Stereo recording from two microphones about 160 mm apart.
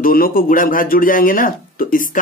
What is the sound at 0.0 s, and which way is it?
Speech, 65° left (ahead or behind).